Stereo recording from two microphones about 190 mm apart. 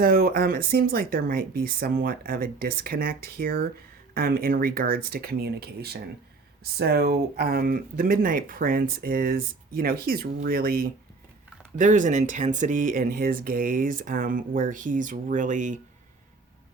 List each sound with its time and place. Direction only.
0.0 s speech: 50° right (ahead or behind)